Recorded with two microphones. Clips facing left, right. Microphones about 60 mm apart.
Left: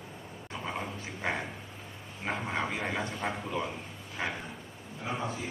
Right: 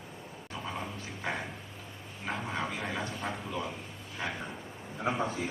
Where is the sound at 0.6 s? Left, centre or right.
Centre.